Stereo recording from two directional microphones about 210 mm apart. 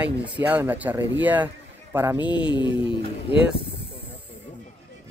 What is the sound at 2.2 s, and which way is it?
Speech, 20° left (ahead or behind).